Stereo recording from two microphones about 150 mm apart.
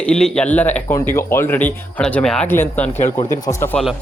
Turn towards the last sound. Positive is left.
turn(degrees=15)  # may be behind; listen again after turning